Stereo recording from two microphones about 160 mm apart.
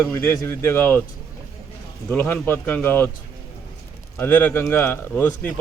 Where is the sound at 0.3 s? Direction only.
15° left (ahead or behind).